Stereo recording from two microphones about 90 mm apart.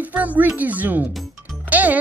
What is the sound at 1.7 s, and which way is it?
Music, 15° right (ahead or behind).